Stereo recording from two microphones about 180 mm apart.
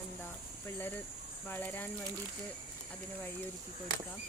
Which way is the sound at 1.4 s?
10° left (ahead or behind).